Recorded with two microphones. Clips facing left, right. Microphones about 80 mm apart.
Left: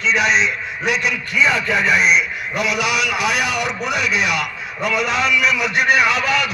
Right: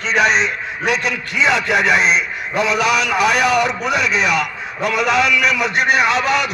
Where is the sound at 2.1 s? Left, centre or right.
Right.